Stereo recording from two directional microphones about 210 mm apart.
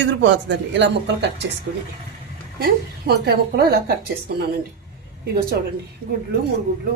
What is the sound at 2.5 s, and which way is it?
A woman's voice, 50° right (ahead or behind).